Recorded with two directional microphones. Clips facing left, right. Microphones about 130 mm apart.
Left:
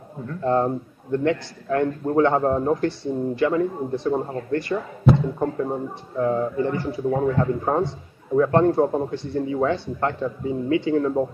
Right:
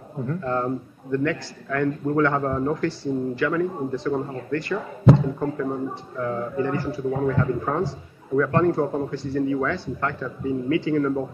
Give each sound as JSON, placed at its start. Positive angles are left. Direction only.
{"t": 0.4, "sound": "a man's voice", "side_deg": 30}